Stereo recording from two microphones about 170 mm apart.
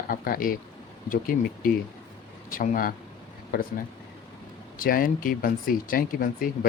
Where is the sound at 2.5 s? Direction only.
55° left (ahead or behind).